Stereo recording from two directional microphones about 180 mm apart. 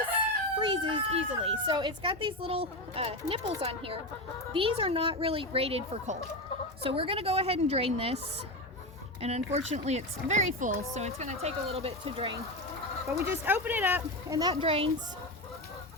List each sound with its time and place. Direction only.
0.6 s speech: 25° right (ahead or behind)
13.1 s speech: 15° right (ahead or behind)
14.5 s speech: 35° right (ahead or behind)